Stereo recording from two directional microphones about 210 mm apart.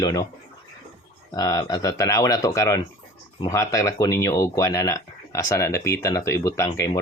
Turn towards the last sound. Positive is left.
turn(degrees=15)  # may be behind; listen again after turning